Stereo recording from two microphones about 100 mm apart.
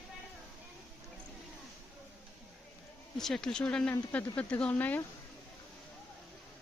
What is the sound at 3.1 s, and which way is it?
Speech, 5° left (ahead or behind).